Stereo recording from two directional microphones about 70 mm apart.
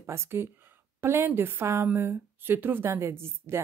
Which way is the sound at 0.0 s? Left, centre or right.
Right.